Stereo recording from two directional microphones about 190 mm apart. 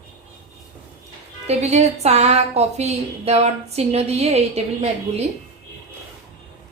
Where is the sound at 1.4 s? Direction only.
35° right (ahead or behind).